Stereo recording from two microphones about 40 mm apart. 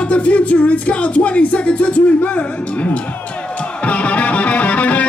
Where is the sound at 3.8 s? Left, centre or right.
Left.